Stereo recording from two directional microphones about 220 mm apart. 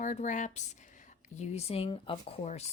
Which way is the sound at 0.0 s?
35° left (ahead or behind).